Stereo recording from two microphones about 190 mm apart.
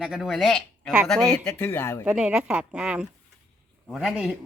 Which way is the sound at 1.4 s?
10° left (ahead or behind).